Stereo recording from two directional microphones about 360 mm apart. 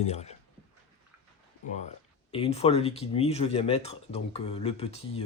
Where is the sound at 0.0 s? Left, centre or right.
Centre.